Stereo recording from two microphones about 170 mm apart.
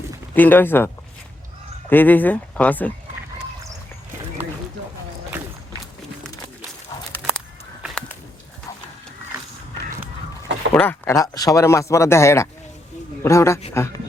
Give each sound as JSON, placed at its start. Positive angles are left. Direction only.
{"t": 0.3, "sound": "speech", "side_deg": 10}
{"t": 1.9, "sound": "speech", "side_deg": 10}
{"t": 7.2, "sound": "a sound", "side_deg": -5}
{"t": 10.8, "sound": "speech", "side_deg": 15}